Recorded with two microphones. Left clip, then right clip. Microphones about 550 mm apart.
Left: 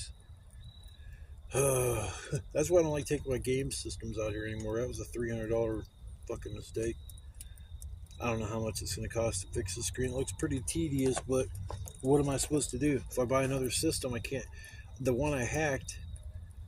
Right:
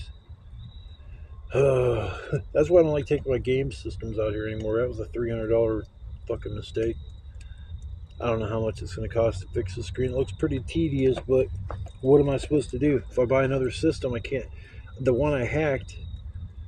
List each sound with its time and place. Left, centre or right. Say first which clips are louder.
1.5 s speech: right 9 dB; left
8.2 s speech: right 9 dB; left